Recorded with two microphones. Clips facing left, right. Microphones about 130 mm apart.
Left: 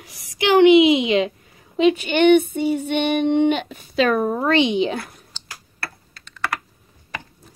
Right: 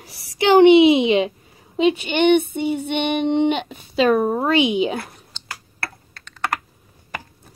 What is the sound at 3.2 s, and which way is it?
Speech, 15° right (ahead or behind).